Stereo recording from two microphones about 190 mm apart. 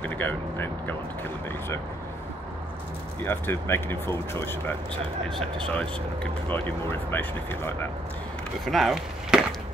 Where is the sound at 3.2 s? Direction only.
15° left (ahead or behind).